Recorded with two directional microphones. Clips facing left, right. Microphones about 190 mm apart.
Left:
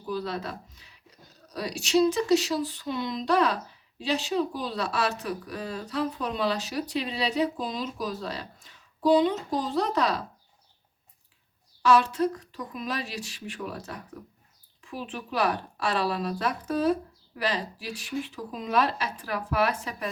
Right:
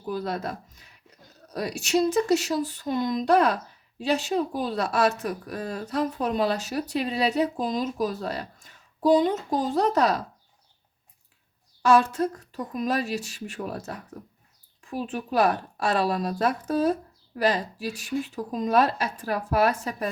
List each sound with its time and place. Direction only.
0.1 s speech: 45° right (ahead or behind)
11.8 s speech: 45° right (ahead or behind)